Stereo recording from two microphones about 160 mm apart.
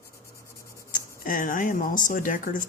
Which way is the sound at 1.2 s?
60° left (ahead or behind).